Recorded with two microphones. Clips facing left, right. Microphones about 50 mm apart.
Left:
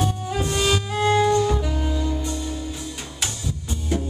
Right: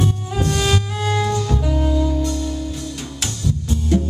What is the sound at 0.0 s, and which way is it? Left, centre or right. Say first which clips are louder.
Music: right 3 dB; centre.